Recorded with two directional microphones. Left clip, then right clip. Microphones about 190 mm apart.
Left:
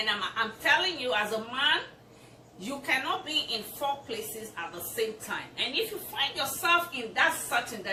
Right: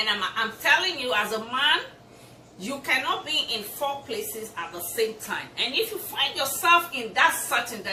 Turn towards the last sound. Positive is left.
turn(degrees=-15)  # may be behind; listen again after turning